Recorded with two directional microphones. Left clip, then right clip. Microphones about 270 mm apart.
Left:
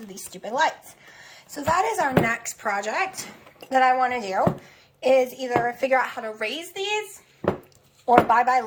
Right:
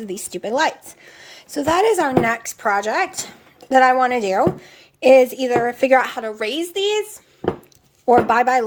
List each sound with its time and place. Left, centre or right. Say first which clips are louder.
0.3 s speech: right 4 dB; right
8.0 s speech: right 3 dB; right